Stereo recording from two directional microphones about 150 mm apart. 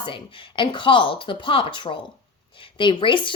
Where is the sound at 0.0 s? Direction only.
35° left (ahead or behind).